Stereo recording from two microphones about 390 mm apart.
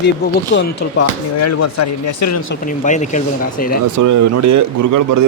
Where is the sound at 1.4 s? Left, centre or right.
Left.